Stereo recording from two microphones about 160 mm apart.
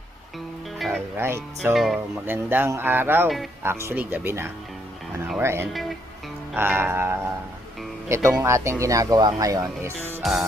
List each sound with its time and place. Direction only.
0.8 s music: centre (ahead or behind)
1.1 s speech: 15° right (ahead or behind)
1.7 s speech: centre (ahead or behind)
2.2 s speech: 10° right (ahead or behind)
3.2 s speech: centre (ahead or behind)
3.6 s speech: 15° right (ahead or behind)
8.3 s speech: 15° right (ahead or behind)